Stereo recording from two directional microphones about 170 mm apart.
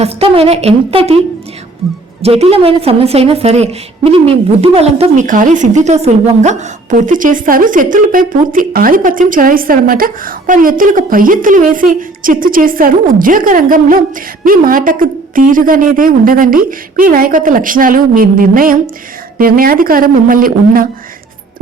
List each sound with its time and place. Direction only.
0.0 s a woman's voice: 35° right (ahead or behind)
2.2 s a woman's voice: 35° right (ahead or behind); by 20.8 s 55° right (ahead or behind)